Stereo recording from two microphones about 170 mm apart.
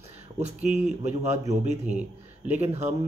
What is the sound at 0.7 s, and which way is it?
A man's voice, 45° right (ahead or behind).